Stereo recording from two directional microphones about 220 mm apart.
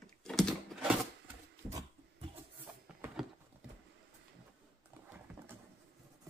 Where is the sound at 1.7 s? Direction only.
25° right (ahead or behind).